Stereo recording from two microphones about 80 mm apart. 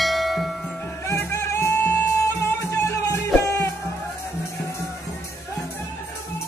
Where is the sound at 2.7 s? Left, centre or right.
Left.